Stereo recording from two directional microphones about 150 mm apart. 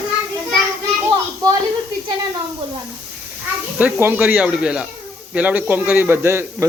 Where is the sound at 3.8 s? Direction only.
10° right (ahead or behind).